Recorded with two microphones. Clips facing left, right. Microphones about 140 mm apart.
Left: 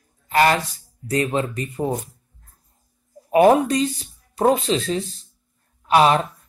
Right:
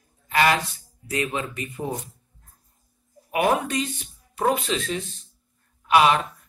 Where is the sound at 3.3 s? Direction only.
35° left (ahead or behind).